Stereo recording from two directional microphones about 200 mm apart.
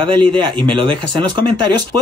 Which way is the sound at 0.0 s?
25° right (ahead or behind).